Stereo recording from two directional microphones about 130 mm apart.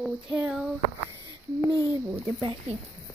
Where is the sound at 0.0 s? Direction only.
Centre (ahead or behind).